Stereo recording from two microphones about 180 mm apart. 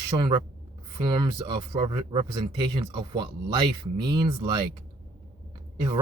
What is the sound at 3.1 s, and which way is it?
Speech, 25° right (ahead or behind).